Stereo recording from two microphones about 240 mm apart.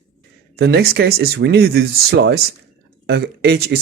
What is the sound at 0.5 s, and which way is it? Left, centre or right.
Speech, right.